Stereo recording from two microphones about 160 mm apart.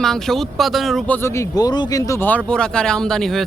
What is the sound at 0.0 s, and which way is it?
Speech, centre (ahead or behind).